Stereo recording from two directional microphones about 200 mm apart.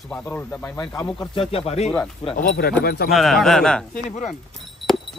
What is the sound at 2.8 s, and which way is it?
Speech, 50° left (ahead or behind).